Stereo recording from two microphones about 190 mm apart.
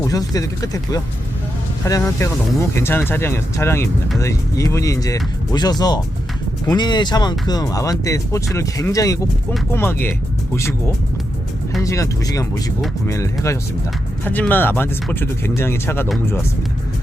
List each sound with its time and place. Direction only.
0.0 s speech: 20° left (ahead or behind)